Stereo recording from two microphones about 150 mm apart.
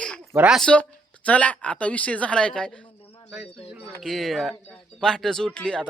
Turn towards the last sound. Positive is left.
turn(degrees=5)  # may be behind; listen again after turning